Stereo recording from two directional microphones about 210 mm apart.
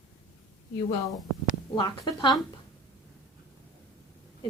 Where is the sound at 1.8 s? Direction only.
20° left (ahead or behind).